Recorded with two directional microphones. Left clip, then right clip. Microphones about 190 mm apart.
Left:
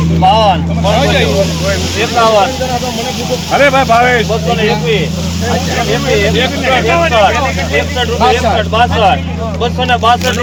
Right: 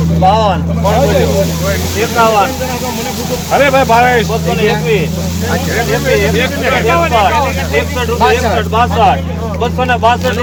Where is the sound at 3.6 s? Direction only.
60° right (ahead or behind).